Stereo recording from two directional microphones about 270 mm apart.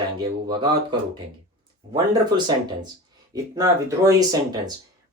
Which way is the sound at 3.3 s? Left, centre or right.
Centre.